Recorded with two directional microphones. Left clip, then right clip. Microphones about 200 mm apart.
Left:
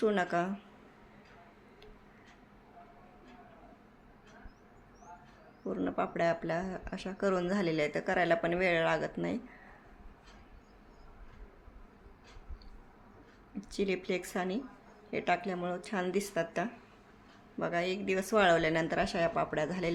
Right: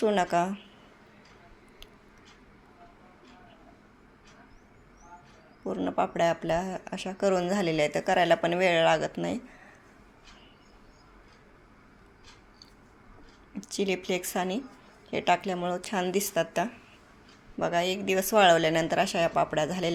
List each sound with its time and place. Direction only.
0.0 s speech: 10° right (ahead or behind)
5.6 s speech: 5° right (ahead or behind)
13.6 s speech: 5° right (ahead or behind)